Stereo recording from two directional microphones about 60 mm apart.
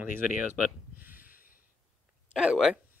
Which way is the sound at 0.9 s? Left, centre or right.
Right.